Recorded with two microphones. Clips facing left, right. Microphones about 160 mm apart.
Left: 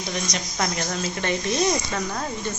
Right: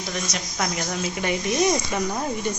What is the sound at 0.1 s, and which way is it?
Speech, centre (ahead or behind).